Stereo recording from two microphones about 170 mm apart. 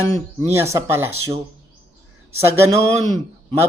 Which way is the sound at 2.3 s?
15° right (ahead or behind).